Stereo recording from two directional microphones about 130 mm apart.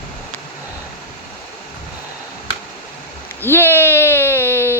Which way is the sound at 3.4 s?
15° left (ahead or behind).